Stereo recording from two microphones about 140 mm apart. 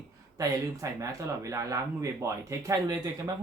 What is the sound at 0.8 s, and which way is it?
Speech, 25° right (ahead or behind).